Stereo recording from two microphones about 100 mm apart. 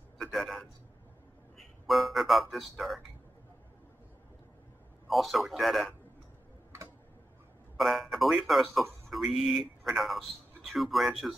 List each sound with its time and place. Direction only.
0.2 s a sound: centre (ahead or behind)
1.6 s speech: centre (ahead or behind)
5.0 s speech: centre (ahead or behind)
7.7 s speech: centre (ahead or behind)